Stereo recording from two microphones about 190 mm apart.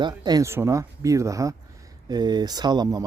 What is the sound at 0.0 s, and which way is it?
Speech, 20° right (ahead or behind).